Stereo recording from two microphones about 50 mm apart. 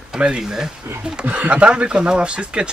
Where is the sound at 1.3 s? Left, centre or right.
Right.